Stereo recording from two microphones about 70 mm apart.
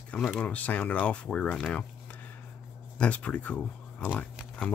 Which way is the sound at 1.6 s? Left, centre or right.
Left.